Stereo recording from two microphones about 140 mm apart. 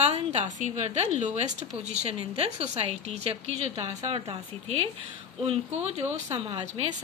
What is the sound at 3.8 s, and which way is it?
Speech, 25° right (ahead or behind).